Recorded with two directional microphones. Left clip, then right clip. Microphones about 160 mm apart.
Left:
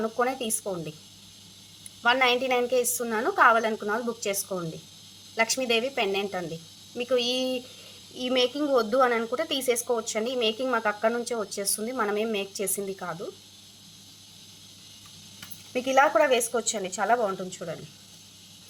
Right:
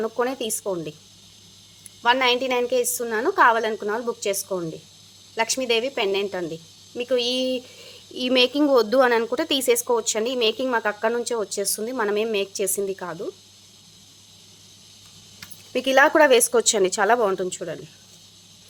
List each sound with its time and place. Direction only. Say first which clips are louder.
0.0 s a woman's voice: right 2 dB; 40° right (ahead or behind)
2.0 s a woman's voice: right 3 dB; 35° right (ahead or behind)
8.1 s a woman's voice: right 6 dB; 45° right (ahead or behind)
15.7 s a woman's voice: right 4 dB; 60° right (ahead or behind)